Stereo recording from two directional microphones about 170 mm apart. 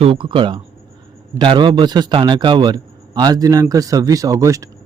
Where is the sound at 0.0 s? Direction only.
30° right (ahead or behind).